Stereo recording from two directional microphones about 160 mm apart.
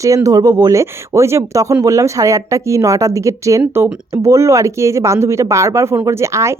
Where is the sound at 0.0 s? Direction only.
20° right (ahead or behind).